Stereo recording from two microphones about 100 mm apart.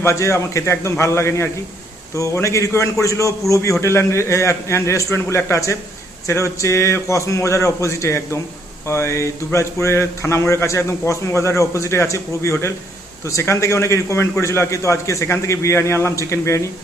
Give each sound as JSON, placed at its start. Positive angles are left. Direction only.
{"t": 0.0, "sound": "a man's voice", "side_deg": 30}